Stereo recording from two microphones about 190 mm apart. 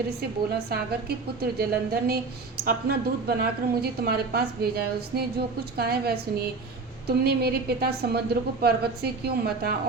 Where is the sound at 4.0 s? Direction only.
55° right (ahead or behind).